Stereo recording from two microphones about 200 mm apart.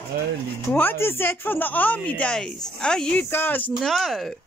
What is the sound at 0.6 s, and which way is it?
Speech, 10° left (ahead or behind).